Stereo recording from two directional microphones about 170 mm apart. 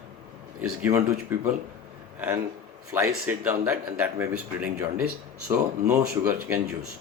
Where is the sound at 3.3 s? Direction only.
10° right (ahead or behind).